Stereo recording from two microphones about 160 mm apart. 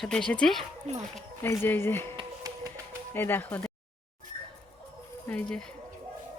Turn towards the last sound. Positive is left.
turn(degrees=5)  # may be behind; listen again after turning